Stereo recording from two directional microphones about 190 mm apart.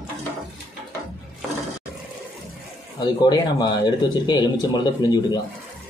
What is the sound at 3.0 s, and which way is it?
Speech, 20° left (ahead or behind).